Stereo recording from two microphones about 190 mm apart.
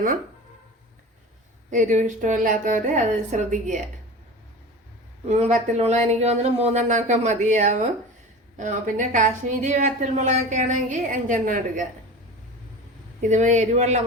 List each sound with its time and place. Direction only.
1.7 s a woman's voice: 40° right (ahead or behind)
5.2 s a woman's voice: 35° right (ahead or behind)
13.2 s a woman's voice: 40° right (ahead or behind)